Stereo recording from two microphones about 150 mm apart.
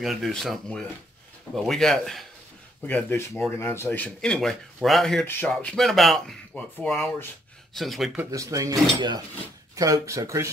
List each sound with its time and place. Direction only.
0.0 s speech: centre (ahead or behind)
8.3 s speech: 20° right (ahead or behind)